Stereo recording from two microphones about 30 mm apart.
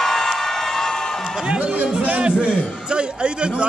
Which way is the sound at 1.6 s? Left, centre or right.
Right.